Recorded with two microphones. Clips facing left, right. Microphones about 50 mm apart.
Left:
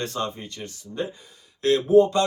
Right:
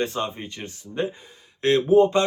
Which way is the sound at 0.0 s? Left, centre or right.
Centre.